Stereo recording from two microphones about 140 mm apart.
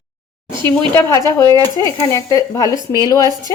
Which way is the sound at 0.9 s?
20° left (ahead or behind).